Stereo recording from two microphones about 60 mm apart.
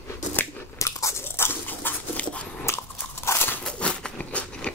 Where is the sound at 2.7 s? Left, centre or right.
Left.